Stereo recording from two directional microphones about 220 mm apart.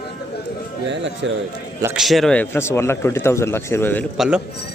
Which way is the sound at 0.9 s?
55° right (ahead or behind).